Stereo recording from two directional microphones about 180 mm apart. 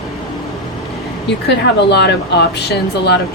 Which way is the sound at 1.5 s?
70° left (ahead or behind).